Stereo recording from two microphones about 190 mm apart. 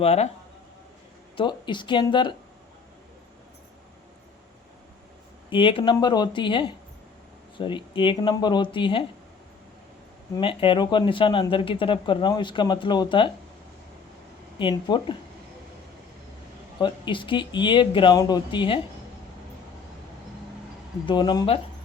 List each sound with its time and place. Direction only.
0.0 s speech: 35° left (ahead or behind)
1.4 s speech: 25° left (ahead or behind)
5.5 s speech: 25° left (ahead or behind)
10.3 s speech: 25° left (ahead or behind)
14.6 s speech: 25° left (ahead or behind)
16.8 s speech: 25° left (ahead or behind)
21.1 s speech: 20° left (ahead or behind)